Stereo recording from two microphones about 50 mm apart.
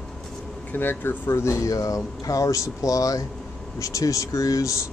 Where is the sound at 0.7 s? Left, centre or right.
Left.